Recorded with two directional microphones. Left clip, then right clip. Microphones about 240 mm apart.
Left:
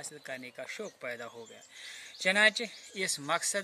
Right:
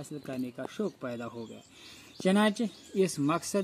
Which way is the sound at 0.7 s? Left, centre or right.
Left.